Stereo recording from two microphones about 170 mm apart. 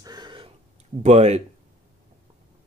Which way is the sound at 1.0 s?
40° right (ahead or behind).